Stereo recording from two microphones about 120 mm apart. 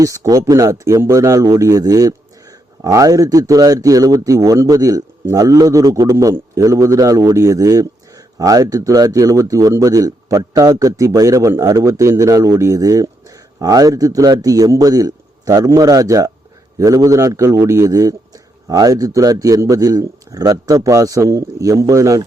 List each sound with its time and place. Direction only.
0.0 s a man's voice: 25° right (ahead or behind)